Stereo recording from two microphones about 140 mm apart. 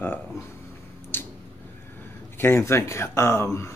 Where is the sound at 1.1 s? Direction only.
15° left (ahead or behind).